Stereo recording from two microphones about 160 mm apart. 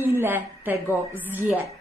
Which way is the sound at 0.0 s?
15° right (ahead or behind).